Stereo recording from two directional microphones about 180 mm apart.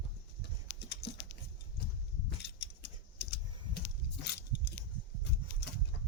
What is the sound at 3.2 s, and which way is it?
Typing, 60° left (ahead or behind).